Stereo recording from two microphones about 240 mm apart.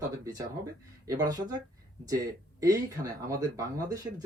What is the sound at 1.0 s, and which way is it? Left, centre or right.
Speech, centre.